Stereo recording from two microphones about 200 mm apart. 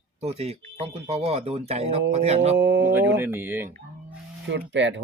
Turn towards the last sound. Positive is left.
turn(degrees=-65)  # may be behind; listen again after turning